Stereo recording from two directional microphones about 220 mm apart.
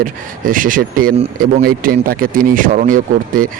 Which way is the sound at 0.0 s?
40° right (ahead or behind).